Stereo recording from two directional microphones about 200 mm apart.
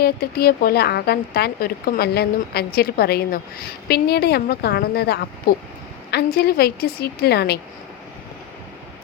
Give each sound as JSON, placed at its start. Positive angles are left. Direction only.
{"t": 0.0, "sound": "speech", "side_deg": 50}